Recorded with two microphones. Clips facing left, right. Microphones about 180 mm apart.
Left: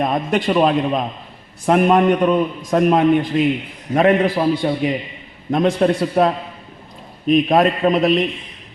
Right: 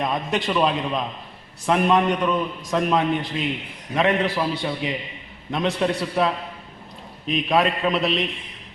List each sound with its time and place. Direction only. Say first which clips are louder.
0.0 s a man's voice: left 5 dB; 50° left (ahead or behind)